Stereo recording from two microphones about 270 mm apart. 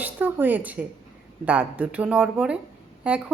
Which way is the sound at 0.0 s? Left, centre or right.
Centre.